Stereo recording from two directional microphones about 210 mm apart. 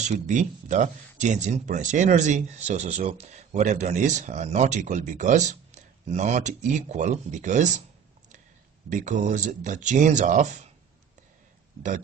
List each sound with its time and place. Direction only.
0.0 s speech: 35° right (ahead or behind)
8.9 s speech: 35° right (ahead or behind)